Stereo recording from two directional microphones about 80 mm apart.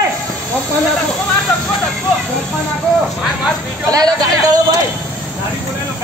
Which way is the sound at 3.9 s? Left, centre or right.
Right.